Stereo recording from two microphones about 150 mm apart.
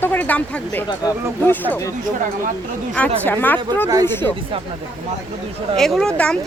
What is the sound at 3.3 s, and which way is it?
Speech, 10° left (ahead or behind).